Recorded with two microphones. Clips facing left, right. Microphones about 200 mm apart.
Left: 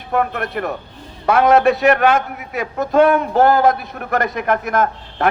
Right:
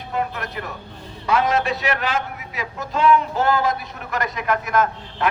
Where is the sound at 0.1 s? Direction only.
55° left (ahead or behind).